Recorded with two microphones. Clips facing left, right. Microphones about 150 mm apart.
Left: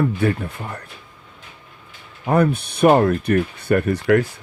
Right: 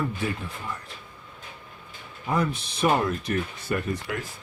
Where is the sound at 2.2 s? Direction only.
60° left (ahead or behind).